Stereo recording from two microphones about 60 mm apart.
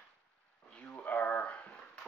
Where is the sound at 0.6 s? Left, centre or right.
Left.